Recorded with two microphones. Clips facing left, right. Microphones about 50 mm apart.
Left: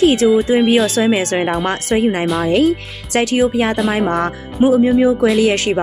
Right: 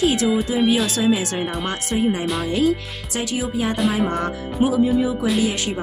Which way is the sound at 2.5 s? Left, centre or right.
Left.